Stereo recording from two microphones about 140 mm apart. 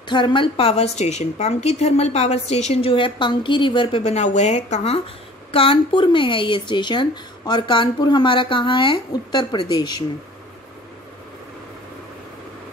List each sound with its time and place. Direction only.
0.0 s a woman's voice: 35° left (ahead or behind); by 5.0 s 50° left (ahead or behind)
5.5 s speech: 40° left (ahead or behind)